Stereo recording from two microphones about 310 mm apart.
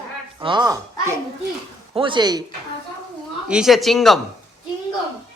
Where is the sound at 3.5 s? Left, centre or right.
Centre.